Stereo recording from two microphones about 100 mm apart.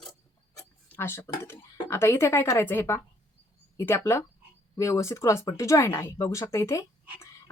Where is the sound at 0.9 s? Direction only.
25° left (ahead or behind).